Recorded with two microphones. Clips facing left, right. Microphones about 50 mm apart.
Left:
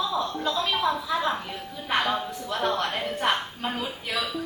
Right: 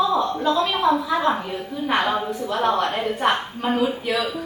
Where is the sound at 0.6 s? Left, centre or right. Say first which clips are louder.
Right 6 dB; centre.